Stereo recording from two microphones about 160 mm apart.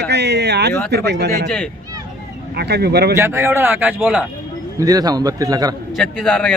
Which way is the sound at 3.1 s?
15° right (ahead or behind).